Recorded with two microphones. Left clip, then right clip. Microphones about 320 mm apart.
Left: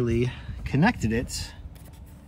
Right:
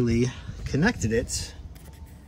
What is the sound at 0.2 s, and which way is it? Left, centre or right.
Speech, centre.